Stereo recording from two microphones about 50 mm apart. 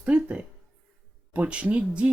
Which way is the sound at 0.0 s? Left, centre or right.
Right.